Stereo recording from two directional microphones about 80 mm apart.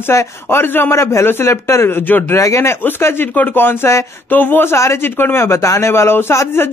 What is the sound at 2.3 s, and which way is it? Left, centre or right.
Speech, left.